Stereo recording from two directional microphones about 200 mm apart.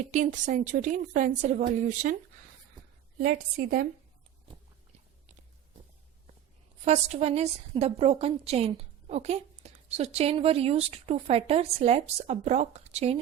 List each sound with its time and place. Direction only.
0.0 s a woman's voice: 35° right (ahead or behind)
3.2 s a woman's voice: 50° right (ahead or behind)
6.8 s a woman's voice: 35° right (ahead or behind)